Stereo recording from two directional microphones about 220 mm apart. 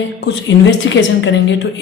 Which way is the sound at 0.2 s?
55° left (ahead or behind).